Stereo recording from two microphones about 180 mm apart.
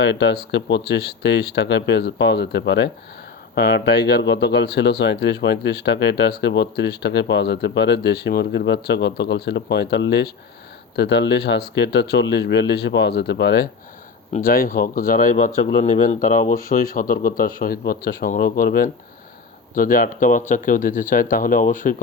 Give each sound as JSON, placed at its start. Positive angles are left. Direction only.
{"t": 0.0, "sound": "speech", "side_deg": 80}
{"t": 14.3, "sound": "speech", "side_deg": 55}